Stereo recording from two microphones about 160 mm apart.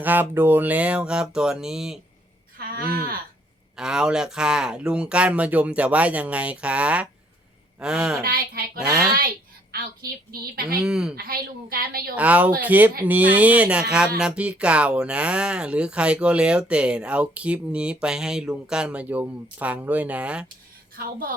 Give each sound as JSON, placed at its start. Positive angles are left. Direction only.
{"t": 0.0, "sound": "speech", "side_deg": -10}
{"t": 2.6, "sound": "a woman's voice", "side_deg": -70}
{"t": 3.8, "sound": "speech", "side_deg": -5}
{"t": 8.2, "sound": "a woman's voice", "side_deg": -70}
{"t": 10.5, "sound": "a woman's voice", "side_deg": -70}
{"t": 10.8, "sound": "speech", "side_deg": -5}
{"t": 11.1, "sound": "a woman's voice", "side_deg": -70}
{"t": 12.1, "sound": "speech", "side_deg": -10}
{"t": 20.9, "sound": "a woman's voice", "side_deg": -65}